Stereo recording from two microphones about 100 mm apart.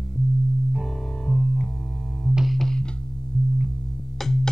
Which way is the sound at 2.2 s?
Centre (ahead or behind).